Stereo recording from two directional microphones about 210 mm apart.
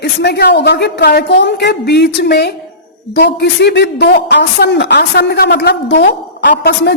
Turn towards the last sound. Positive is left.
turn(degrees=50)  # may be behind; listen again after turning